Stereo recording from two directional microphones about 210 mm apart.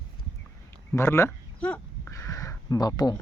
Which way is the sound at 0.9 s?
10° left (ahead or behind).